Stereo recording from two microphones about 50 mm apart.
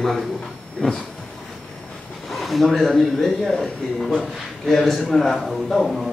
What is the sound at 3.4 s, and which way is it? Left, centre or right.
Speech, centre.